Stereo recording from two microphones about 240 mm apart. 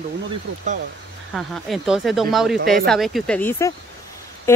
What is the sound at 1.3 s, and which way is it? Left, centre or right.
Speech, centre.